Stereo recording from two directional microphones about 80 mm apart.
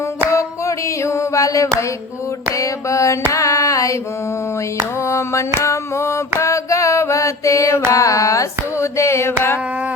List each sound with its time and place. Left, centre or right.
0.3 s a sound: left
2.6 s carnatic music: left
3.3 s music: left
4.9 s carnatic music: left
6.4 s a sound: left
7.9 s carnatic music: left